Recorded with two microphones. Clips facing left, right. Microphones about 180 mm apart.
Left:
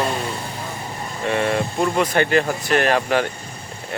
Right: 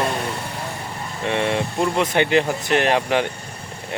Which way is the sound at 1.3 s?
20° right (ahead or behind).